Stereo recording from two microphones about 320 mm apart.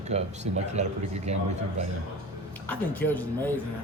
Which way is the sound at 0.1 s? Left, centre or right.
Right.